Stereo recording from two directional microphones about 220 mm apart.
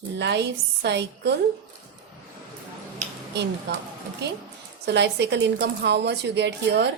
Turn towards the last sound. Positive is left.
turn(degrees=-50)  # may be behind; listen again after turning